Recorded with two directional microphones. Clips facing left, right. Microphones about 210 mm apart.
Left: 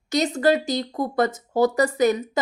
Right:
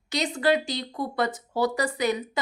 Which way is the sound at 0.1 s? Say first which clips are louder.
Left 4 dB; 45° left (ahead or behind).